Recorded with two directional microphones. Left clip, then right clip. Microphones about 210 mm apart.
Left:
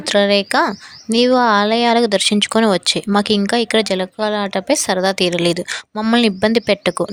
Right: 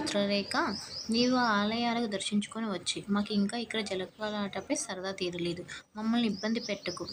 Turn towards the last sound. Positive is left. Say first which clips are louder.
# left 19 dB
turn(degrees=55)  # may be behind; listen again after turning